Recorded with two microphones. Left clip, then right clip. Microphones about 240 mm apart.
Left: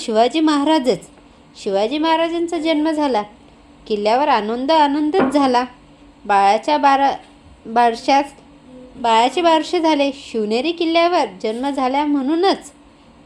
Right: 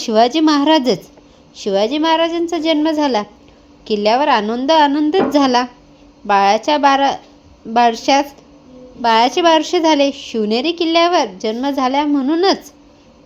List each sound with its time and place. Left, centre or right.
0.0 s a woman's voice: right